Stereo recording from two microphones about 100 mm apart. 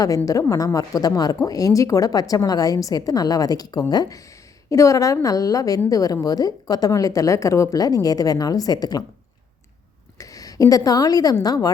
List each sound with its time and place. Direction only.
0.4 s a woman's voice: 35° left (ahead or behind)
10.2 s a woman's voice: 35° left (ahead or behind)